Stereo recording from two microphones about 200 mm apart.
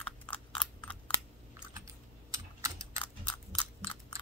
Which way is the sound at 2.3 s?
15° right (ahead or behind).